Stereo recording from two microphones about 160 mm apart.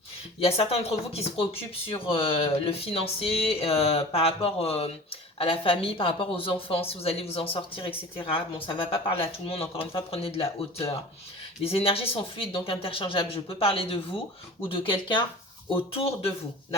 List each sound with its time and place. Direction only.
0.3 s speech: 35° left (ahead or behind)